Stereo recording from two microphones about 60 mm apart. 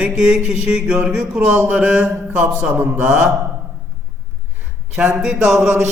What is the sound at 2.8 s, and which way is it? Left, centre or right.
Mantra, right.